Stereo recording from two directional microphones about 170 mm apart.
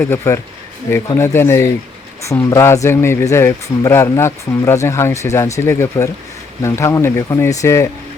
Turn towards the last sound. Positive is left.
turn(degrees=20)  # may be behind; listen again after turning